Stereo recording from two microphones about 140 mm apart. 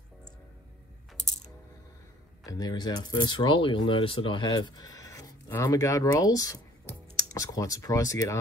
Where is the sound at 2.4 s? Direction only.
30° left (ahead or behind).